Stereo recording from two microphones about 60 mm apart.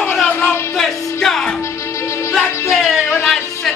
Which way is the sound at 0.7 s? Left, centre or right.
Centre.